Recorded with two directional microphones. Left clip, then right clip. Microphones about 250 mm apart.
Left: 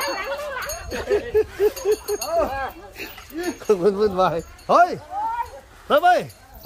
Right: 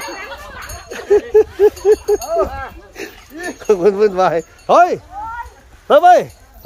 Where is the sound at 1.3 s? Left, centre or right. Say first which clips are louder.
Right 8 dB; centre.